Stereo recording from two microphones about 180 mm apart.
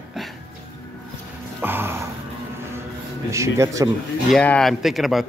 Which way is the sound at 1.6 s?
10° right (ahead or behind).